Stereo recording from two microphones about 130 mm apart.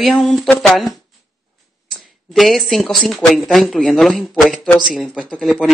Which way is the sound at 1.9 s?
Centre (ahead or behind).